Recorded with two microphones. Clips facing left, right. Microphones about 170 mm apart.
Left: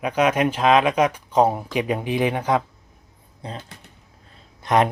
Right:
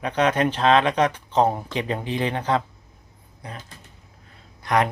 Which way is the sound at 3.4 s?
25° left (ahead or behind).